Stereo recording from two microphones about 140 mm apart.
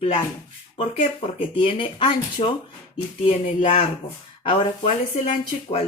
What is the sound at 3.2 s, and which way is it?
Speech, 50° left (ahead or behind).